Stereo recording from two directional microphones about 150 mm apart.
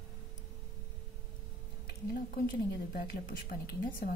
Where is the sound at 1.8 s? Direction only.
85° left.